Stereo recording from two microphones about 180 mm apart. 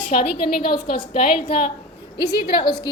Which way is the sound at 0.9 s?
30° left (ahead or behind).